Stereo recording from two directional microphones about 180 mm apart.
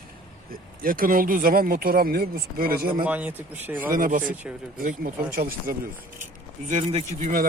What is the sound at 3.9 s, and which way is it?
Speech, 50° right (ahead or behind).